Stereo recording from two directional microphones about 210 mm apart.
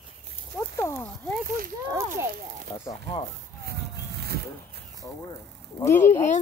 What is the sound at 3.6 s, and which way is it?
Vehicle, 50° right (ahead or behind).